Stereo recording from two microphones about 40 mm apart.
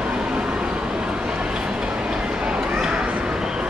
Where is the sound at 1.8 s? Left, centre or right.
Right.